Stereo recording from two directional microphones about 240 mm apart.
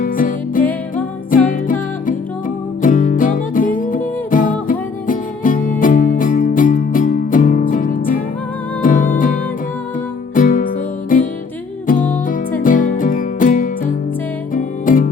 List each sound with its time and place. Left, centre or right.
0.0 s music: left
0.6 s music: centre
1.3 s music: left
12.3 s music: left